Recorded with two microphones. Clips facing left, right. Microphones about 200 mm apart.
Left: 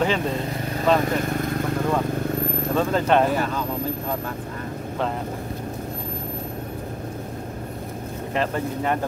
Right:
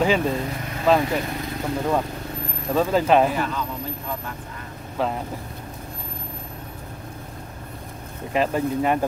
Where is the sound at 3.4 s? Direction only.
45° left (ahead or behind).